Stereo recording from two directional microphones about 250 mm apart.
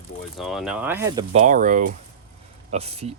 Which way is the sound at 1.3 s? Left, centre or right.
Right.